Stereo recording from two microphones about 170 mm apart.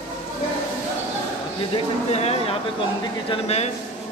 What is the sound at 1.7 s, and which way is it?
Speech, 40° left (ahead or behind).